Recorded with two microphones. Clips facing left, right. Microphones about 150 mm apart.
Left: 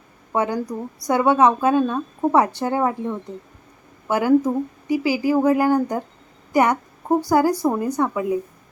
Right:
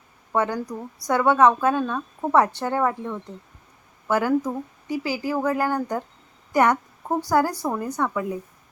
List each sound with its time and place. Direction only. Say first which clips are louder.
0.3 s speech: left 2 dB; 15° left (ahead or behind)